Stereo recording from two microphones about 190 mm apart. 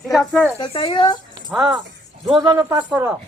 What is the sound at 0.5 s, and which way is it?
Speech, 25° left (ahead or behind).